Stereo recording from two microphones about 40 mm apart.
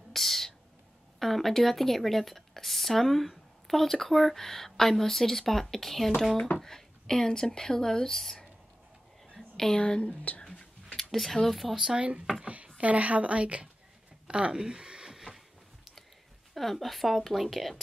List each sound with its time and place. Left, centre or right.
0.1 s speech: centre
9.3 s a sound: centre
9.8 s speech: left
10.0 s speech: left
10.4 s whispering: left
11.0 s a sound: centre
11.4 s a woman's voice: centre
11.7 s speech: centre
12.7 s a woman's voice: right
14.2 s a sound: right
16.5 s a woman's voice: centre